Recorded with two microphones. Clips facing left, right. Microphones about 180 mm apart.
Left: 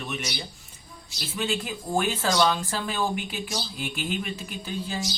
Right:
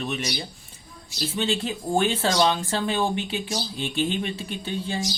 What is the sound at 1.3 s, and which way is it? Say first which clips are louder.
Speech: right 2 dB; 30° right (ahead or behind).